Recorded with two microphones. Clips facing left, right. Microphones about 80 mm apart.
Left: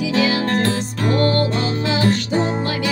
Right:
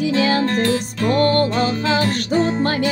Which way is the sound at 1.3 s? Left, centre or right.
Right.